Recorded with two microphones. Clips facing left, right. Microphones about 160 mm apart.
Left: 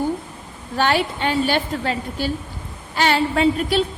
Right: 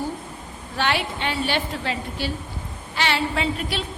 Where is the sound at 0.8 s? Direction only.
45° left (ahead or behind).